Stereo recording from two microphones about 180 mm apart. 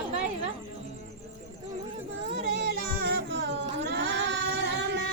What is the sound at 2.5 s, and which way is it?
Music, 65° right (ahead or behind).